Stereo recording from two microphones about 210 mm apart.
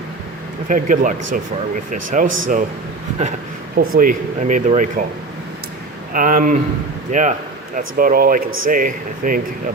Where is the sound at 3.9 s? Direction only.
40° right (ahead or behind).